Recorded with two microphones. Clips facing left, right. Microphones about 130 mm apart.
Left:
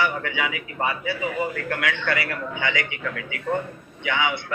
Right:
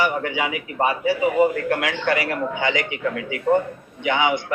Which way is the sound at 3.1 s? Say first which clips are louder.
Right 10 dB; 25° right (ahead or behind).